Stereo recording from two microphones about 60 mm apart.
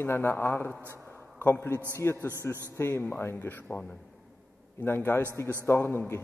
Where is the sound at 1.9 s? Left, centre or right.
Left.